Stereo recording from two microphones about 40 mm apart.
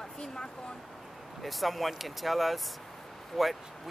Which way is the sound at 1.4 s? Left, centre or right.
Centre.